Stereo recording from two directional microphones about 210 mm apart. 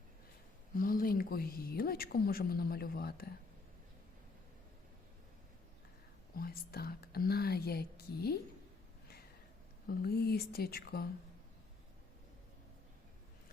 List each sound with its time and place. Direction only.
0.8 s a woman's voice: 45° left (ahead or behind)
6.3 s a woman's voice: 45° left (ahead or behind)
9.9 s a woman's voice: 50° left (ahead or behind)